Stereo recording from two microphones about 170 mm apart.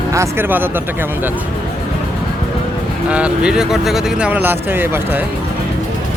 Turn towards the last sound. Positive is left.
turn(degrees=-10)  # may be behind; listen again after turning